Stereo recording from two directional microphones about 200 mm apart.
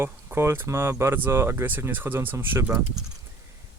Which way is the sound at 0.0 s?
10° right (ahead or behind).